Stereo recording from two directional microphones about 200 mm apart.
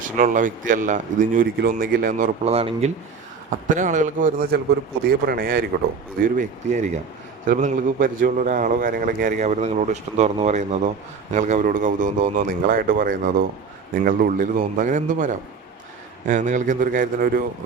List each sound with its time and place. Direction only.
0.2 s a man's voice: 40° right (ahead or behind)